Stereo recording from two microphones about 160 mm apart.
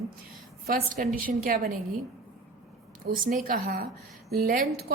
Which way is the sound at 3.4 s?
65° right (ahead or behind).